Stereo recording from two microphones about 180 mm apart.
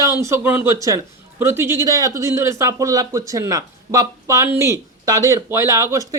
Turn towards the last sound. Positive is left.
turn(degrees=-15)  # may be behind; listen again after turning